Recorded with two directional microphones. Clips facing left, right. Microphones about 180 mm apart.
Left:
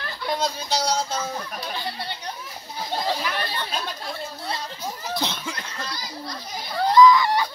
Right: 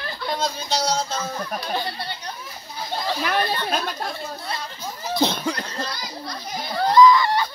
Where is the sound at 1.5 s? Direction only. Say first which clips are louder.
Right 5 dB; 50° right (ahead or behind).